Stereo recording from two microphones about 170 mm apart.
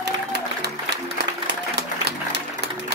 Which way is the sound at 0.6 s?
85° right.